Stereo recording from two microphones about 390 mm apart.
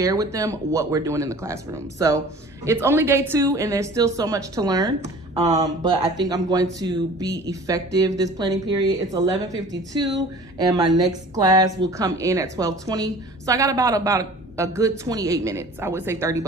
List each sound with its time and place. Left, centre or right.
0.0 s speech: centre